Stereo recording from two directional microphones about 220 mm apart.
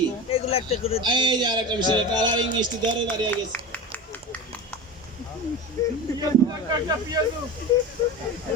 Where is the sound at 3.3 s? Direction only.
5° left (ahead or behind).